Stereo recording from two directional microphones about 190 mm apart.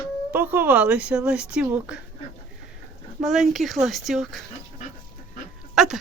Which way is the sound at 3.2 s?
Centre (ahead or behind).